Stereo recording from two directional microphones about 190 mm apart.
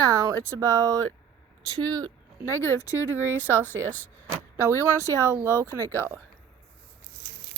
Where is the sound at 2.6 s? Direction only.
15° left (ahead or behind).